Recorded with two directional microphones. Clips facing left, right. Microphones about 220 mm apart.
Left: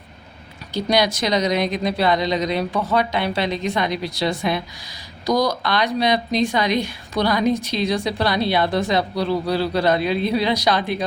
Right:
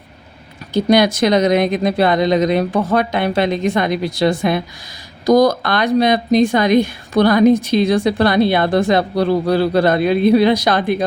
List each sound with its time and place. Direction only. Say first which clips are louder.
0.7 s speech: right 7 dB; 50° right (ahead or behind)